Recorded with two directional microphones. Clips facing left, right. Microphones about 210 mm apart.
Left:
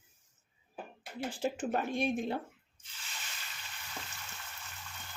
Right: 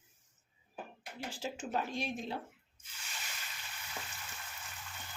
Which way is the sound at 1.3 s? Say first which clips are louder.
Left 6 dB; 55° left (ahead or behind).